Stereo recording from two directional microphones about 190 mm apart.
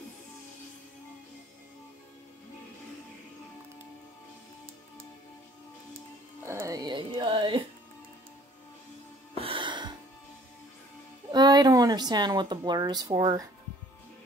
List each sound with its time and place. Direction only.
6.4 s music: 15° right (ahead or behind)
9.4 s music: 25° right (ahead or behind)
11.3 s speech: 20° right (ahead or behind)